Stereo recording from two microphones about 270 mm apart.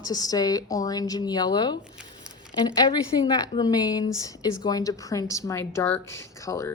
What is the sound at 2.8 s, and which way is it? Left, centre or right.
A woman's voice, centre.